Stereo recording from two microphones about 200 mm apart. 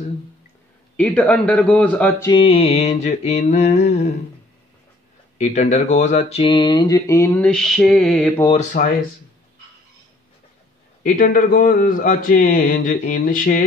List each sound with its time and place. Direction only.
0.9 s speech: 5° left (ahead or behind)
2.3 s mantra: 30° left (ahead or behind)
5.4 s speech: 35° left (ahead or behind); by 8.3 s centre (ahead or behind)
8.5 s mantra: 35° left (ahead or behind)
11.1 s speech: 45° left (ahead or behind)